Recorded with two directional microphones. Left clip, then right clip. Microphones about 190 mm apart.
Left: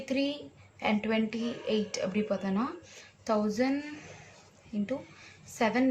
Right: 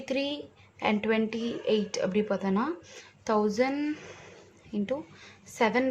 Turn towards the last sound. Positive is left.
turn(degrees=-60)  # may be behind; listen again after turning